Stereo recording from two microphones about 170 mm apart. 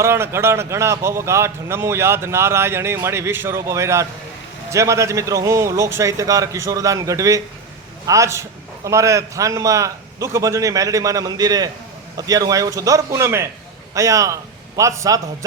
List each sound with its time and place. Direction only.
0.0 s a man's voice: 15° right (ahead or behind)